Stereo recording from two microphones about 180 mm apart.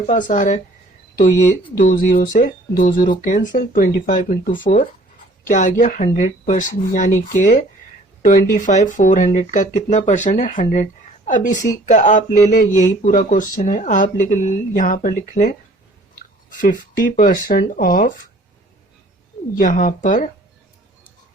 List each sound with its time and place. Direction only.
0.1 s speech: 45° left (ahead or behind)
16.6 s speech: 45° left (ahead or behind)
19.5 s speech: 50° left (ahead or behind)